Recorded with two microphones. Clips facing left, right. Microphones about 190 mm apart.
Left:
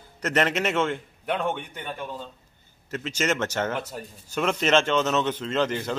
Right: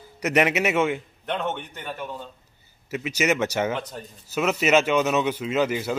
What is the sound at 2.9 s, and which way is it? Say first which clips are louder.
Speech: right 3 dB; 10° right (ahead or behind).